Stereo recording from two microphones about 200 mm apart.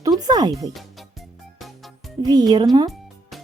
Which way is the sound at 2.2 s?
20° right (ahead or behind).